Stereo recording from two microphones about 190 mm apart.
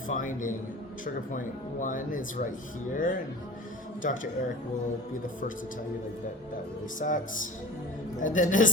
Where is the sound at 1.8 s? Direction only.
45° left (ahead or behind).